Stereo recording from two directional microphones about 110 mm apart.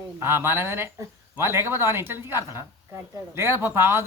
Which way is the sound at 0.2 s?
20° right (ahead or behind).